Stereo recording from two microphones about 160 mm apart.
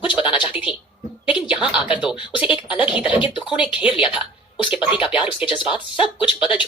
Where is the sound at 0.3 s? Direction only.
5° right (ahead or behind).